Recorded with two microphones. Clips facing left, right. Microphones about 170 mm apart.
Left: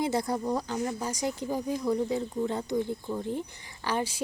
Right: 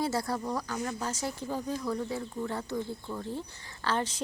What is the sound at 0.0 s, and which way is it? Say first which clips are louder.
Speech: left 3 dB; 20° left (ahead or behind).